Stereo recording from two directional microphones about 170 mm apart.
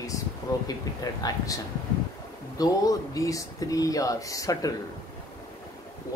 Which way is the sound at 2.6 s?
20° left (ahead or behind).